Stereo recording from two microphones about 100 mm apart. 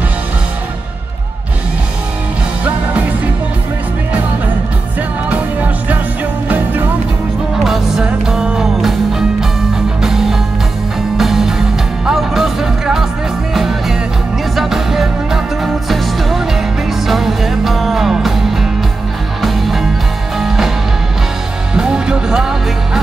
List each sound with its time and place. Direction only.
5.3 s music: 15° right (ahead or behind)
7.5 s music: centre (ahead or behind)
21.7 s music: 5° right (ahead or behind)